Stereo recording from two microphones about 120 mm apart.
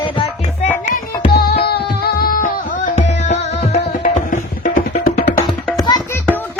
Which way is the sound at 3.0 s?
70° left (ahead or behind).